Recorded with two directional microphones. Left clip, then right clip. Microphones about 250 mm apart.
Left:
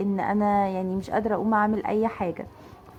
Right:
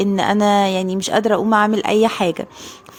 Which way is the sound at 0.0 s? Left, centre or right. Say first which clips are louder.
Right 9 dB; right.